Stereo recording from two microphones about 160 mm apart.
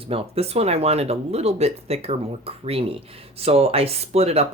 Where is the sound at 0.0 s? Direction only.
35° right (ahead or behind).